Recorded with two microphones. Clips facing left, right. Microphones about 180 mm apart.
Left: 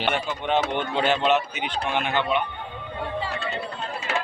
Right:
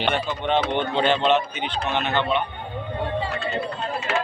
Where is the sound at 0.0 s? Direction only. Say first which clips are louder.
Right 2 dB; 10° left (ahead or behind).